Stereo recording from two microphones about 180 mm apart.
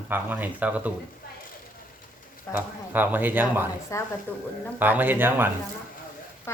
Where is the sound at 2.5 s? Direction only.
10° right (ahead or behind).